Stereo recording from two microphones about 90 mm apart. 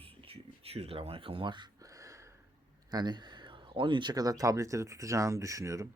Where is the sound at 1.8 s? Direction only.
40° right (ahead or behind).